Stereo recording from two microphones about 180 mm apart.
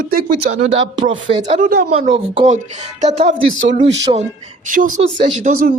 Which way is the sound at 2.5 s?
40° right (ahead or behind).